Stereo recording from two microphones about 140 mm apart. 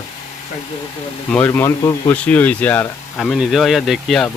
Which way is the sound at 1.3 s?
15° left (ahead or behind).